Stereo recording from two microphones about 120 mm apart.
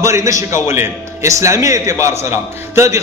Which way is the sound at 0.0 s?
25° right (ahead or behind).